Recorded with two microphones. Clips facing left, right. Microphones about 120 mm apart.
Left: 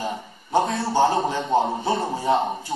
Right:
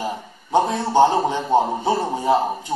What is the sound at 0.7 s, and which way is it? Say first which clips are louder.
Speech: right 7 dB; 20° right (ahead or behind).